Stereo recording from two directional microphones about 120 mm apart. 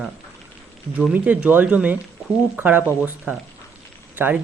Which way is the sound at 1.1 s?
10° right (ahead or behind).